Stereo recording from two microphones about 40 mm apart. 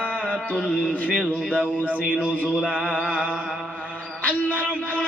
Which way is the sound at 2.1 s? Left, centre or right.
Right.